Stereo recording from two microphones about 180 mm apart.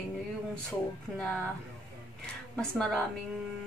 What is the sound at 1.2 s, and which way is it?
Speech, 5° left (ahead or behind).